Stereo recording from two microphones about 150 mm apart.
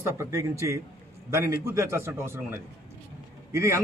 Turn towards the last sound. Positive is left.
turn(degrees=-20)  # may be behind; listen again after turning